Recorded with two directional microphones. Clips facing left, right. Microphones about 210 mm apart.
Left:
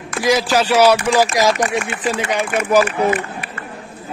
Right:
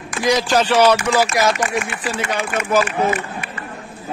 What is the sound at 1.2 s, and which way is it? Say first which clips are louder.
Speech: left 2 dB; 35° left (ahead or behind).